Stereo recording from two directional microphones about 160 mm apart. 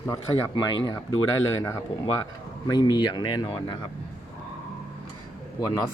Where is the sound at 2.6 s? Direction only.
25° left (ahead or behind).